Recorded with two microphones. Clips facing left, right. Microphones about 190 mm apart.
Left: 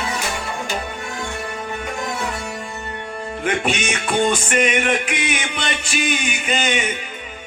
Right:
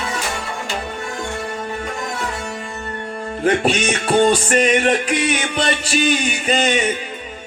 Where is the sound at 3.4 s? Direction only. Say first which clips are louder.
Right 5 dB; 35° right (ahead or behind).